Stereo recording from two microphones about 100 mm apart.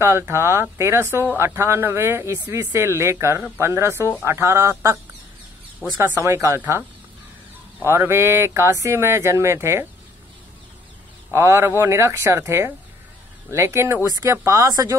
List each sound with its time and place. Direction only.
0.0 s speech: 25° right (ahead or behind)
5.9 s speech: 30° right (ahead or behind)
7.8 s speech: 25° right (ahead or behind)
11.3 s speech: 25° right (ahead or behind)